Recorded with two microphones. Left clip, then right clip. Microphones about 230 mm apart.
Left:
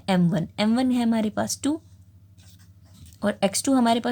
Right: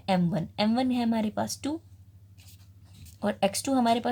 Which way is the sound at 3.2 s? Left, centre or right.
Left.